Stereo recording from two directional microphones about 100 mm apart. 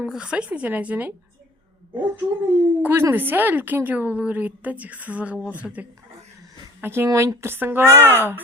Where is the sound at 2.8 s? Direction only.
20° right (ahead or behind).